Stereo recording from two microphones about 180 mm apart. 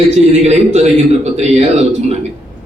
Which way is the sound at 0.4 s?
40° right (ahead or behind).